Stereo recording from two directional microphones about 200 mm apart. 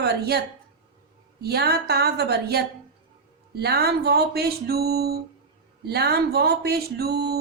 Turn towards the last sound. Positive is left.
turn(degrees=-55)  # may be behind; listen again after turning